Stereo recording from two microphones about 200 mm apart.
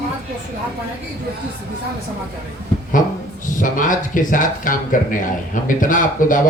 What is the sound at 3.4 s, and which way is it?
Speech, 40° left (ahead or behind).